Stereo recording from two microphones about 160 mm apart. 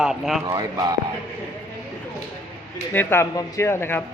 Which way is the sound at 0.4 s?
25° right (ahead or behind).